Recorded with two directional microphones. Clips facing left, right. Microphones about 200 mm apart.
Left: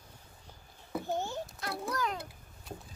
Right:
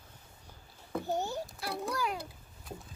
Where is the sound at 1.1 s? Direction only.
40° right (ahead or behind).